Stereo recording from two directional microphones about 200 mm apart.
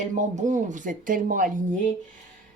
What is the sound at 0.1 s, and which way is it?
Speech, 35° right (ahead or behind).